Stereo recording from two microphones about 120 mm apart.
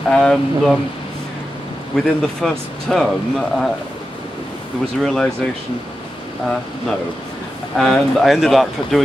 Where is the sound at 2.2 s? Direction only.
5° left (ahead or behind).